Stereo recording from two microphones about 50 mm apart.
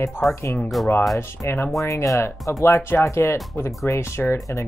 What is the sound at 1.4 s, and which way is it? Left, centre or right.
Speech, left.